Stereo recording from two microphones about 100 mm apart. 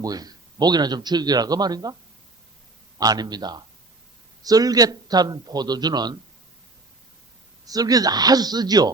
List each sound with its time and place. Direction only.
0.0 s a man's voice: 40° right (ahead or behind)
3.0 s a man's voice: 40° right (ahead or behind)
7.6 s a man's voice: 40° right (ahead or behind)